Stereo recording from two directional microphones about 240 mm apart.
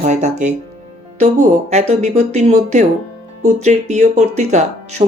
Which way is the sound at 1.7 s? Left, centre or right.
Right.